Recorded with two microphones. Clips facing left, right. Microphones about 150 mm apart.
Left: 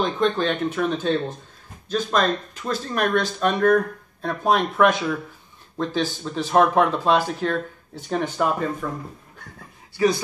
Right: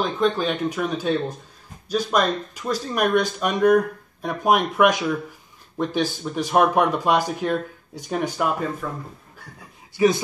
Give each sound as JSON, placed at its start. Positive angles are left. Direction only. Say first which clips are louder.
{"t": 0.0, "sound": "speech", "louder": "even", "side_deg": -5}
{"t": 9.9, "sound": "speech", "louder": "right 2 dB", "side_deg": -20}